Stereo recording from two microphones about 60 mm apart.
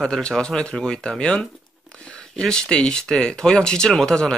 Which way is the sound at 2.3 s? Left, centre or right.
Centre.